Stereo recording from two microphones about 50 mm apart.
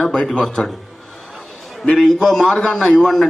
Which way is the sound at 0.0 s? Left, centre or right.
Centre.